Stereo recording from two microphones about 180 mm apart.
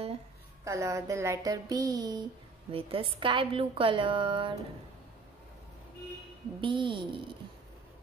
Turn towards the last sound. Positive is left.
turn(degrees=-25)  # may be behind; listen again after turning